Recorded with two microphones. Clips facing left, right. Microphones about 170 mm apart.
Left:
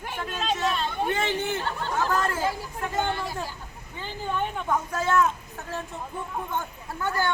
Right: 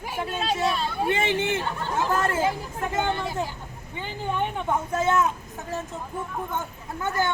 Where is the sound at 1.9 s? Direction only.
25° right (ahead or behind).